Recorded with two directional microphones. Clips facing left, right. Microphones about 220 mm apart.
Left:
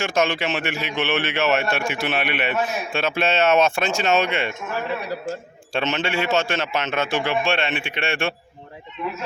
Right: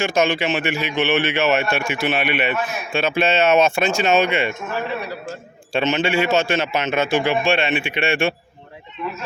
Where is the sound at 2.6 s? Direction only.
30° left (ahead or behind).